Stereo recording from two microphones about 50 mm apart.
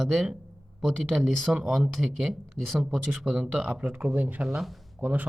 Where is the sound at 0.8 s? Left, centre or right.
Centre.